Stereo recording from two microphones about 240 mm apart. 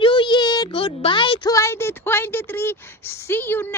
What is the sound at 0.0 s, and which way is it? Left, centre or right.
Speech, left.